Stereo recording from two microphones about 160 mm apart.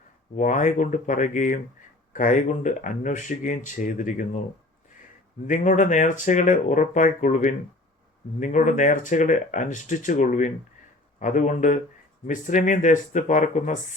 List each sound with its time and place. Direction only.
0.3 s speech: 50° left (ahead or behind)
5.5 s speech: 50° left (ahead or behind)